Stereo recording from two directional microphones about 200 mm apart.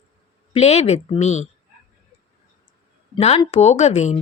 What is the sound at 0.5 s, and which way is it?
Speech, 30° left (ahead or behind).